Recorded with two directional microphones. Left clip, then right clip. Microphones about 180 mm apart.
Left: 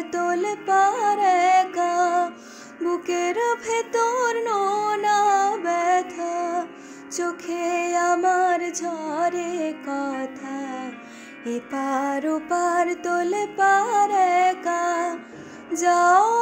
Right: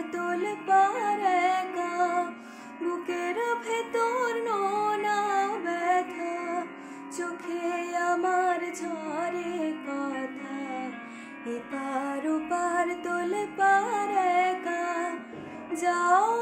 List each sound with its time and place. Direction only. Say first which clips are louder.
0.1 s music: left 8 dB; 40° left (ahead or behind)